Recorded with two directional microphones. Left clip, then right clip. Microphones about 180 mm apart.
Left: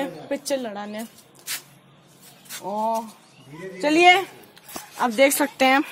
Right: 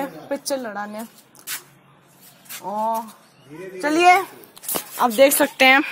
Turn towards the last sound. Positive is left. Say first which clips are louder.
# right 4 dB
turn(degrees=0)  # may be behind; listen again after turning